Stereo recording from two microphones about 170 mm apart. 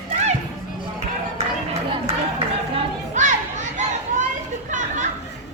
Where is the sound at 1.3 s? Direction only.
40° right (ahead or behind).